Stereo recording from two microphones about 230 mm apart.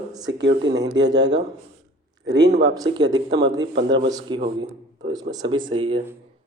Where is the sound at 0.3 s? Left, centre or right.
Right.